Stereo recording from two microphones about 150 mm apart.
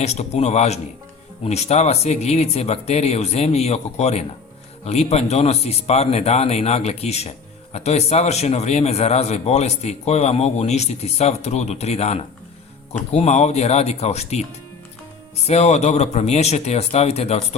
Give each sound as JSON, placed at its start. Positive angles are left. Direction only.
{"t": 0.0, "sound": "speech", "side_deg": 45}
{"t": 15.4, "sound": "speech", "side_deg": 50}